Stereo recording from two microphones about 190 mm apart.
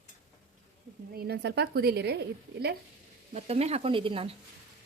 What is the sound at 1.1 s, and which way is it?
A woman's voice, 55° right (ahead or behind).